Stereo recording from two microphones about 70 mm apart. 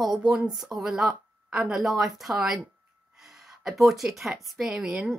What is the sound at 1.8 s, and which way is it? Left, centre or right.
Speech, centre.